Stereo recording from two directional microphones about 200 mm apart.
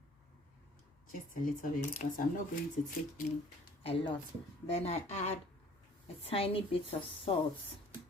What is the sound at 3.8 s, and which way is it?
Speech, 25° left (ahead or behind).